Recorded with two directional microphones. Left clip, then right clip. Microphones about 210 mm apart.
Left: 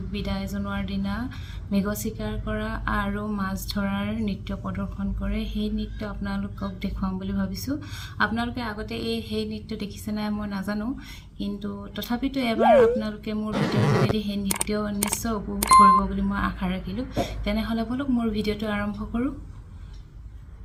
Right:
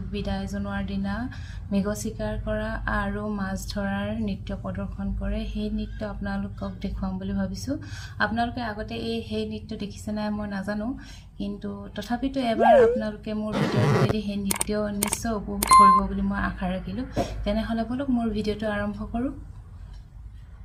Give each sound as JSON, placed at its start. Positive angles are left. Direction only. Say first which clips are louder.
{"t": 0.2, "sound": "speech", "louder": "even", "side_deg": 5}
{"t": 2.4, "sound": "a sound", "louder": "left 1 dB", "side_deg": 10}
{"t": 11.9, "sound": "speech", "louder": "even", "side_deg": 5}